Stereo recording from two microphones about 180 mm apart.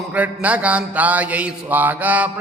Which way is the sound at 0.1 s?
10° right (ahead or behind).